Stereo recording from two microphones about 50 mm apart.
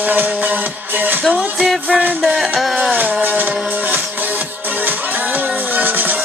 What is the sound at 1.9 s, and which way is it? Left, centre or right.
Music, centre.